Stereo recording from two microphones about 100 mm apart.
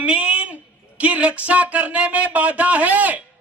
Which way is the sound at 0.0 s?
10° right (ahead or behind).